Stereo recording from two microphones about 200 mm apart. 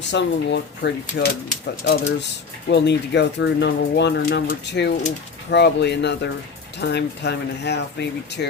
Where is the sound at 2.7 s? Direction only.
60° left (ahead or behind).